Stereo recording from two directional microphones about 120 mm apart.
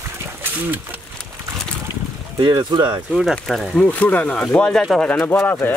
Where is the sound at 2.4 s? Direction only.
40° right (ahead or behind).